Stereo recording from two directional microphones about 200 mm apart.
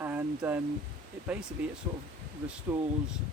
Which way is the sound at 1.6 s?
5° right (ahead or behind).